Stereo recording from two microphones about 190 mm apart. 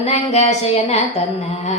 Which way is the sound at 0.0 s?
35° left (ahead or behind).